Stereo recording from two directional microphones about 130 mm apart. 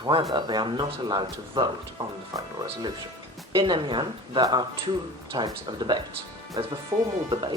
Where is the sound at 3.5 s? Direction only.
40° right (ahead or behind).